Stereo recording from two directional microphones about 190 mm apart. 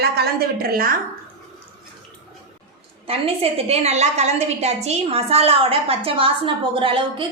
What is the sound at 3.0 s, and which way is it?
A woman's voice, 30° right (ahead or behind).